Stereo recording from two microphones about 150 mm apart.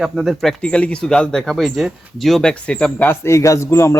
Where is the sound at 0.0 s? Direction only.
Centre (ahead or behind).